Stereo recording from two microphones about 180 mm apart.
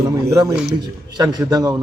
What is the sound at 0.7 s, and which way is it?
Speech, 20° right (ahead or behind).